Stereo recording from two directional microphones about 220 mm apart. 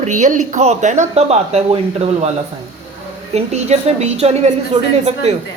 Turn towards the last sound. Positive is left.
turn(degrees=-30)  # may be behind; listen again after turning